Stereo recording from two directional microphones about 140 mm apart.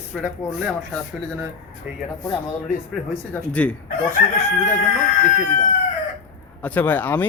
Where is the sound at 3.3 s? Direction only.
10° left (ahead or behind).